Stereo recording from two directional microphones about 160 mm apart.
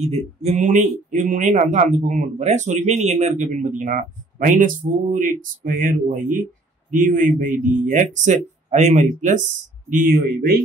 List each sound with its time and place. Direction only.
0.1 s speech: 45° right (ahead or behind)